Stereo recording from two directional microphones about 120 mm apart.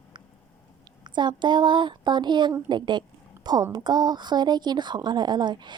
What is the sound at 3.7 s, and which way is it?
Speech, 35° right (ahead or behind).